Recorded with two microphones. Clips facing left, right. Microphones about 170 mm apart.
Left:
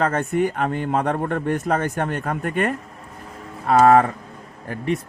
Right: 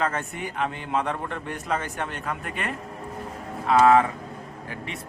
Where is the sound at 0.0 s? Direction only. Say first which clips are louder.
Left 8 dB; 45° left (ahead or behind).